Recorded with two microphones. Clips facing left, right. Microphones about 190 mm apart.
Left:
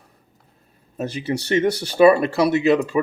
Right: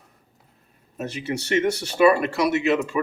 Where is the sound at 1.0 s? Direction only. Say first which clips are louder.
Left 4 dB; 35° left (ahead or behind).